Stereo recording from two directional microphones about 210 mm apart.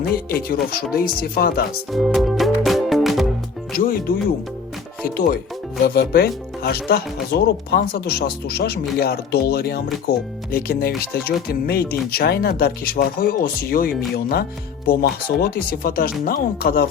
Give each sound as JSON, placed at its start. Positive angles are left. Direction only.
{"t": 0.3, "sound": "speech", "side_deg": 45}
{"t": 1.9, "sound": "music", "side_deg": 0}
{"t": 3.7, "sound": "speech", "side_deg": 45}